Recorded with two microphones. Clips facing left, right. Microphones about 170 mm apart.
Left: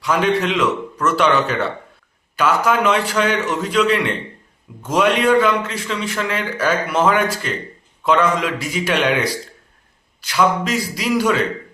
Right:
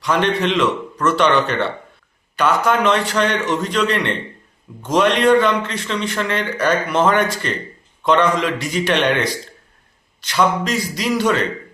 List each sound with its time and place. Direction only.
0.0 s a man's voice: 5° left (ahead or behind)